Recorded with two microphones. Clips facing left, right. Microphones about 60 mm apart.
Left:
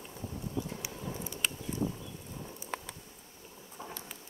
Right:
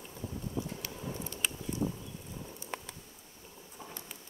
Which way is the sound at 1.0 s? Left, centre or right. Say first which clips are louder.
Right 1 dB; centre.